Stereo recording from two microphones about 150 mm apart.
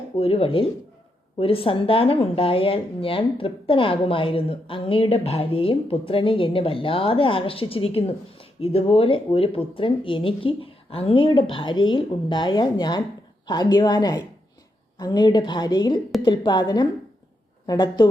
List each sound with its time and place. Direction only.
0.2 s a woman's voice: 40° left (ahead or behind)